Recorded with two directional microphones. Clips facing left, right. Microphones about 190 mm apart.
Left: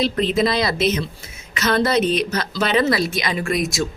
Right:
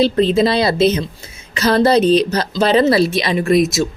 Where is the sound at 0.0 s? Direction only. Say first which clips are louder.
Right 6 dB; 30° right (ahead or behind).